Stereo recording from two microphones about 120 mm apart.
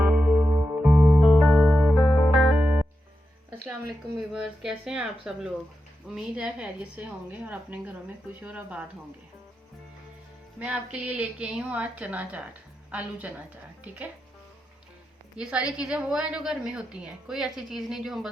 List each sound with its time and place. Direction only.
0.0 s music: 5° right (ahead or behind)
1.2 s music: centre (ahead or behind)
3.5 s a sound: 15° right (ahead or behind)
4.3 s a woman's voice: 5° right (ahead or behind)
10.6 s a woman's voice: 10° right (ahead or behind)
15.4 s a woman's voice: 10° right (ahead or behind)